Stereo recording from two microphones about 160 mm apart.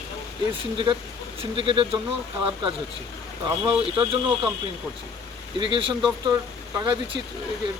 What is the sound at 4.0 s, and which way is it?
Speech, 30° right (ahead or behind).